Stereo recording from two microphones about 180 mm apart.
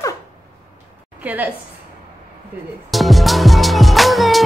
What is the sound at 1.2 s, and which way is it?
Speech, 10° right (ahead or behind).